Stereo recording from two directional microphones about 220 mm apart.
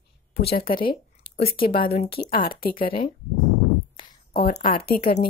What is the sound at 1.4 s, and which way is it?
Speech, 40° left (ahead or behind).